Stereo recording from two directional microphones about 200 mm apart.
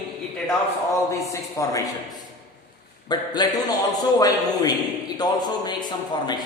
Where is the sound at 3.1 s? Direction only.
20° left (ahead or behind).